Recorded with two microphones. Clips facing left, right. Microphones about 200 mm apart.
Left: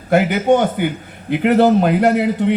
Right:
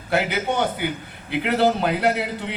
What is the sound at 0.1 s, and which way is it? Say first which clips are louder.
A man's voice: left 9 dB; 45° left (ahead or behind).